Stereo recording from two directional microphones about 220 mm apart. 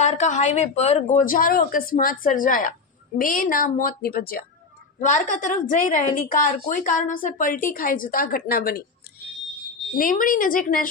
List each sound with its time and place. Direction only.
0.0 s a woman's voice: 30° left (ahead or behind)
10.0 s a woman's voice: 40° left (ahead or behind)